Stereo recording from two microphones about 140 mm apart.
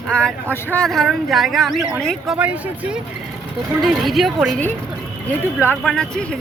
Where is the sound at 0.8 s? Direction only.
Centre (ahead or behind).